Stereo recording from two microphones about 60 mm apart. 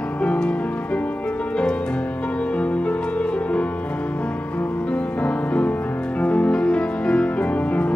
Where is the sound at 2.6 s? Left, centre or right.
Left.